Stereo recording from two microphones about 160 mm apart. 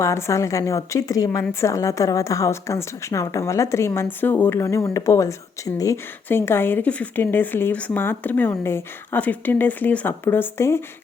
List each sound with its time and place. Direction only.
0.0 s a woman's voice: 20° left (ahead or behind)